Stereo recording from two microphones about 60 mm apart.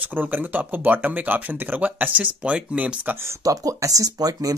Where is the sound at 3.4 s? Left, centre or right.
Right.